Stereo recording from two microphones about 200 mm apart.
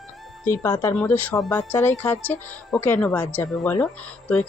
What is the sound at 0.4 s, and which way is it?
Speech, 15° left (ahead or behind).